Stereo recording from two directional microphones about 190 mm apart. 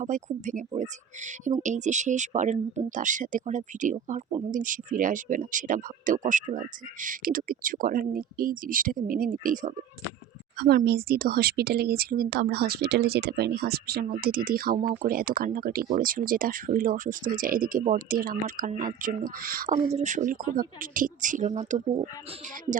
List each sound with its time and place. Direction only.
0.0 s speech: 40° right (ahead or behind)
10.6 s speech: 55° right (ahead or behind); by 21.8 s 40° right (ahead or behind)